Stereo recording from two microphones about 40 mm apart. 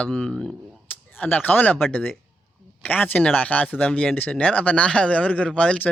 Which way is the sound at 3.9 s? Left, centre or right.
Left.